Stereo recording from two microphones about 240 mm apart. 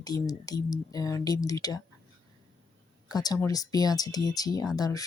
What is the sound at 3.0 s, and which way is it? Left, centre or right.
Speech, centre.